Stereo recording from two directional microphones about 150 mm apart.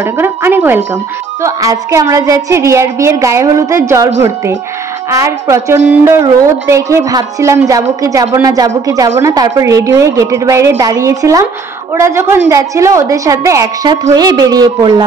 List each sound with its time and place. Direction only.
0.0 s a woman's voice: 15° right (ahead or behind)